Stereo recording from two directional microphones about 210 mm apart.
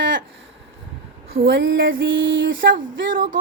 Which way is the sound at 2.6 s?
40° right (ahead or behind).